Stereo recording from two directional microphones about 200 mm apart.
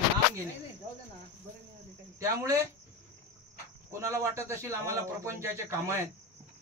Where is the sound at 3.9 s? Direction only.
15° right (ahead or behind).